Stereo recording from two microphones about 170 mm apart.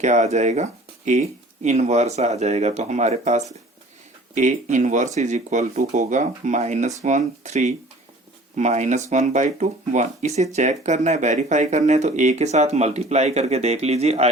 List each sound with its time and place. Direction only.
0.0 s speech: 45° right (ahead or behind)